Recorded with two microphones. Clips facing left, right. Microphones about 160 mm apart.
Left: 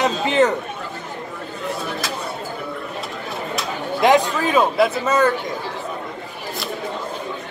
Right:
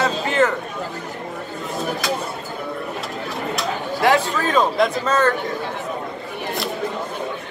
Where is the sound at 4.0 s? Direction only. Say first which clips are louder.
Left 2 dB; 15° left (ahead or behind).